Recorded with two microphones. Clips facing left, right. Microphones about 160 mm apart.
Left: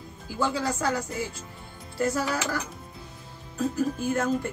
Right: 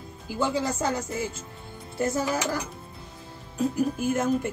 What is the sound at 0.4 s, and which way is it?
Speech, 20° right (ahead or behind).